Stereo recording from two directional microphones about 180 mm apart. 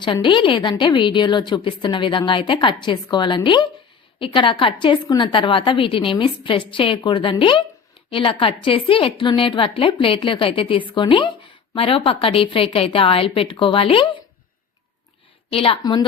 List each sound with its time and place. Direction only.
0.0 s a woman's voice: 25° left (ahead or behind)
15.5 s a woman's voice: 30° left (ahead or behind)